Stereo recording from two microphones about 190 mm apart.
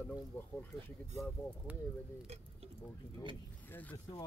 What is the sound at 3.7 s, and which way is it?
Speech, 10° left (ahead or behind).